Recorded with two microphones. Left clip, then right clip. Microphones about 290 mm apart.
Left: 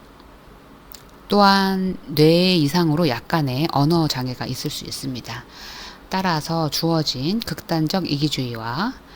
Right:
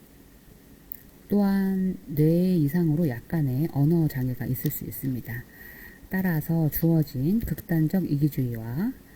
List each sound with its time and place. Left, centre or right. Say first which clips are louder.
1.3 s speech: left 12 dB; left